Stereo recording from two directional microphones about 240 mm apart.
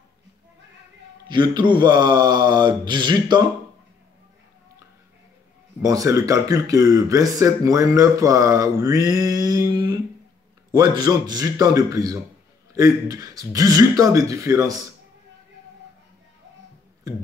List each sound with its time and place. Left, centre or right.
1.3 s a man's voice: centre
5.8 s speech: centre